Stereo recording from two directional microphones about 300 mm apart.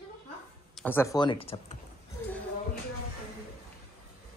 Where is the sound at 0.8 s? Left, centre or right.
Centre.